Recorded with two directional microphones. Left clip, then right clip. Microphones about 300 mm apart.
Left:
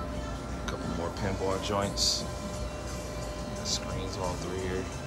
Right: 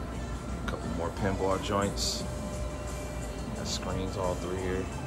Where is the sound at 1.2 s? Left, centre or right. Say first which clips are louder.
Right 3 dB; centre.